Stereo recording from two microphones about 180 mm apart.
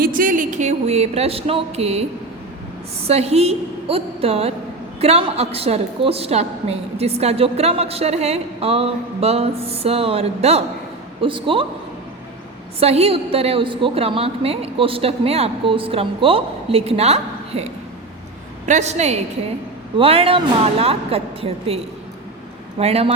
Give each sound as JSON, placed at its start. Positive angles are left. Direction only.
{"t": 0.0, "sound": "a woman's voice", "side_deg": -50}
{"t": 12.8, "sound": "a woman's voice", "side_deg": -35}
{"t": 22.8, "sound": "a woman's voice", "side_deg": -35}